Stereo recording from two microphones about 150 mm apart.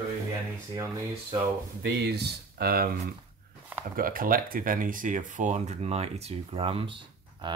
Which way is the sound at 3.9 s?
70° right (ahead or behind).